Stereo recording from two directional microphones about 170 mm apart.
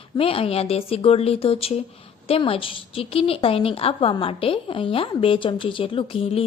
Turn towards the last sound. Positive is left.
turn(degrees=35)  # may be behind; listen again after turning